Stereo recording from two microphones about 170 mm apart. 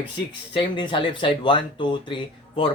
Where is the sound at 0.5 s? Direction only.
30° left (ahead or behind).